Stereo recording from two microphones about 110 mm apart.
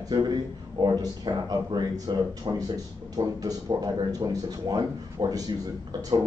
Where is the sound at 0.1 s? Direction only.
40° right (ahead or behind).